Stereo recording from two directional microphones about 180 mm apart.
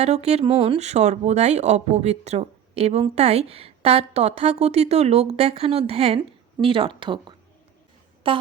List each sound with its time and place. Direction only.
0.0 s speech: 35° right (ahead or behind)